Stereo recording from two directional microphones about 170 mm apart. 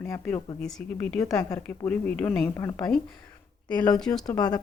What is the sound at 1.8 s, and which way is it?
Speech, 10° left (ahead or behind).